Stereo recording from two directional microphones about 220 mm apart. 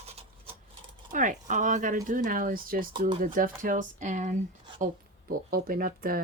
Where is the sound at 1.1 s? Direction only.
35° right (ahead or behind).